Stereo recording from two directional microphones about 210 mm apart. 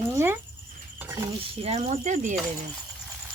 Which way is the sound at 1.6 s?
30° right (ahead or behind).